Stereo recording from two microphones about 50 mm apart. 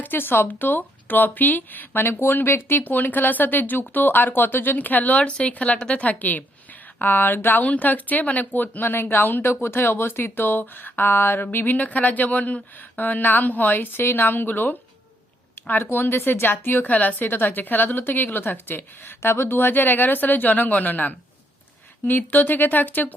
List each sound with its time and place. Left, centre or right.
0.0 s a woman's voice: left
2.8 s speech: left
7.6 s a woman's voice: left
11.5 s speech: left
15.8 s a woman's voice: left